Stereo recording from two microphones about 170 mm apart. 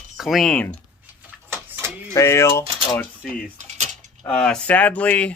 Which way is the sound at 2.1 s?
15° left (ahead or behind).